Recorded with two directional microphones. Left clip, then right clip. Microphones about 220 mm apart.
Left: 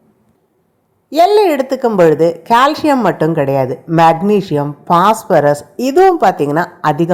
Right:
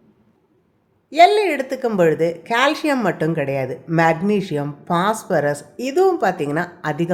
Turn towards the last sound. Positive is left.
turn(degrees=20)  # may be behind; listen again after turning